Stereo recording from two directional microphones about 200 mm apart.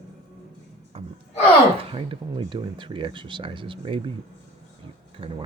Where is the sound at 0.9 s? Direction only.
30° right (ahead or behind).